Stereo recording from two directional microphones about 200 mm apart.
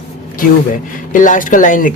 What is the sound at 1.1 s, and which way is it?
Speech, 40° left (ahead or behind).